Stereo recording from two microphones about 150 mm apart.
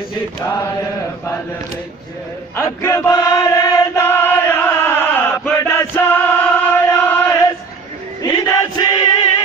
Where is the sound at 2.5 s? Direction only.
20° left (ahead or behind).